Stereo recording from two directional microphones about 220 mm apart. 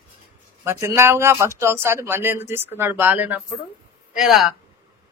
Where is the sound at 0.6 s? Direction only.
10° right (ahead or behind).